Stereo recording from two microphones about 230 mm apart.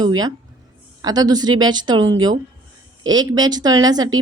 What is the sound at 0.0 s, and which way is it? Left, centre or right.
A woman's voice, centre.